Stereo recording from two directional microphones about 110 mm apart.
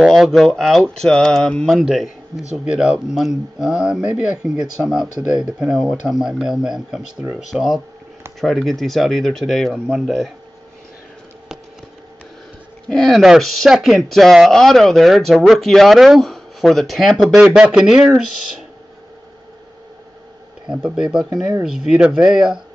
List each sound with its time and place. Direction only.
0.0 s speech: centre (ahead or behind)
12.9 s speech: 5° left (ahead or behind)
20.8 s speech: 5° right (ahead or behind)
21.3 s speech: 35° right (ahead or behind)
21.9 s speech: 10° right (ahead or behind)